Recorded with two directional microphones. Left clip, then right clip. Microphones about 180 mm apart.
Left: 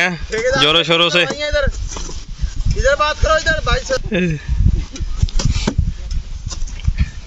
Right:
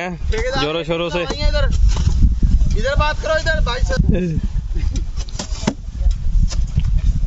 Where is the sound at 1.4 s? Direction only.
90° right.